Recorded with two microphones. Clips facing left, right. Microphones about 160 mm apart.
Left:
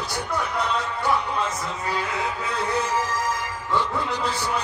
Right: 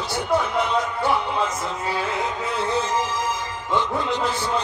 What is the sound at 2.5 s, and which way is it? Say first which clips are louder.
Music: right 2 dB; 25° right (ahead or behind).